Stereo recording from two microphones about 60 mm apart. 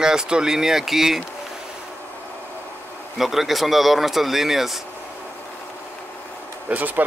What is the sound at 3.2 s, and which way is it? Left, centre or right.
Speech, centre.